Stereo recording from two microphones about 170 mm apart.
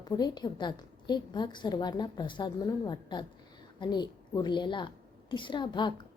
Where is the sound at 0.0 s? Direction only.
25° left (ahead or behind).